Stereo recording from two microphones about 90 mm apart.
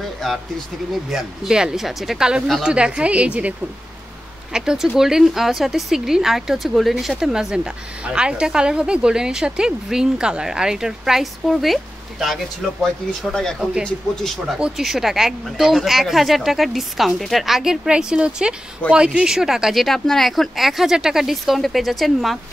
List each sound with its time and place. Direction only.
0.2 s speech: 5° left (ahead or behind)